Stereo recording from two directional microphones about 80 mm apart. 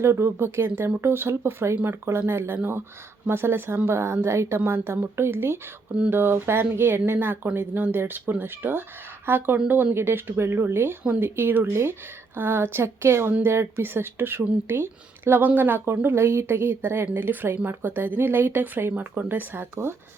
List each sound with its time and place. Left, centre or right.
0.0 s speech: right